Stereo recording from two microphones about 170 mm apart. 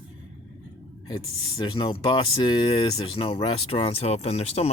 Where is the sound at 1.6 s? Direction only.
30° left (ahead or behind).